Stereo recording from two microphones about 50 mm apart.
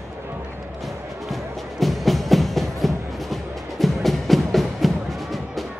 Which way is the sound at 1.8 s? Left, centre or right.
Centre.